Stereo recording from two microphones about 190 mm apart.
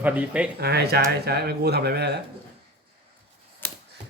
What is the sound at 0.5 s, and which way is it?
Speech, 55° right (ahead or behind).